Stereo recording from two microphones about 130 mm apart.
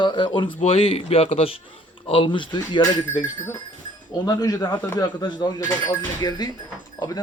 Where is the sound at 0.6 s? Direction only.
50° left (ahead or behind).